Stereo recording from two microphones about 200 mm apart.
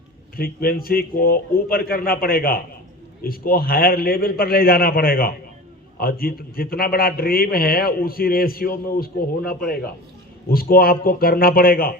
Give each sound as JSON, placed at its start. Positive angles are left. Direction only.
{"t": 0.3, "sound": "a man's voice", "side_deg": 45}